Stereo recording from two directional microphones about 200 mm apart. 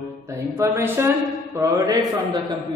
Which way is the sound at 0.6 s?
10° right (ahead or behind).